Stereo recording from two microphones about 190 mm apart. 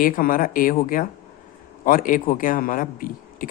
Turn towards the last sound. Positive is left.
turn(degrees=45)  # may be behind; listen again after turning